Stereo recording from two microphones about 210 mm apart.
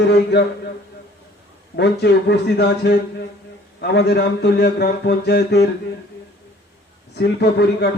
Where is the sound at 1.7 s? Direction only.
55° left (ahead or behind).